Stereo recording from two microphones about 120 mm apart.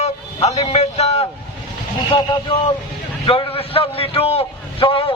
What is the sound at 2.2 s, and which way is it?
Speech, 35° left (ahead or behind).